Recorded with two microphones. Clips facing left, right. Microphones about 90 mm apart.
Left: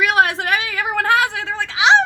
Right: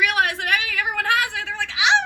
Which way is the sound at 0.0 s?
30° left (ahead or behind).